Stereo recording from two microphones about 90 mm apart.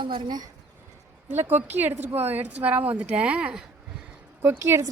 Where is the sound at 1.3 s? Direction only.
20° right (ahead or behind).